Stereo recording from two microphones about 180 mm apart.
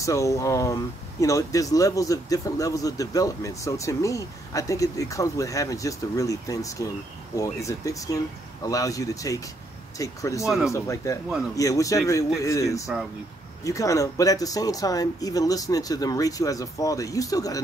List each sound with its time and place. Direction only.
0.0 s a man's voice: 15° left (ahead or behind)
10.4 s speech: centre (ahead or behind)
10.7 s speech: 15° left (ahead or behind)
12.9 s speech: 5° right (ahead or behind)
13.7 s a man's voice: 20° left (ahead or behind)